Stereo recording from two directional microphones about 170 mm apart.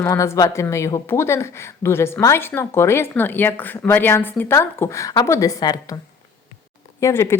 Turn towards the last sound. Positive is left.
turn(degrees=20)  # may be behind; listen again after turning